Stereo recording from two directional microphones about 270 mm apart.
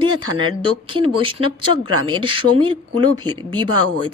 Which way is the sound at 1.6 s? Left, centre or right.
Right.